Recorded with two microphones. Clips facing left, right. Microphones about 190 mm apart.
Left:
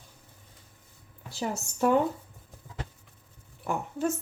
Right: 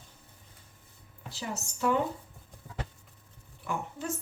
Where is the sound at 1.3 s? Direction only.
50° left (ahead or behind).